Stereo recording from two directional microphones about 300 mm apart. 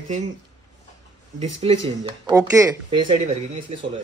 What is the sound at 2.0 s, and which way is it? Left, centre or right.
A man's voice, centre.